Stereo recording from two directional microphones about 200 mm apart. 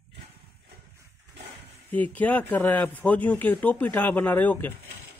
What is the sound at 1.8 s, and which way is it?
Speech, 10° left (ahead or behind).